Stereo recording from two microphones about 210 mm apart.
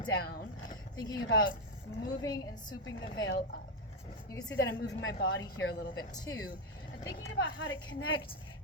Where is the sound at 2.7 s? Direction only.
65° left (ahead or behind).